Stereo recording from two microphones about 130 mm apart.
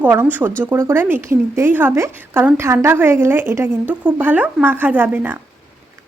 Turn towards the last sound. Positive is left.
turn(degrees=-15)  # may be behind; listen again after turning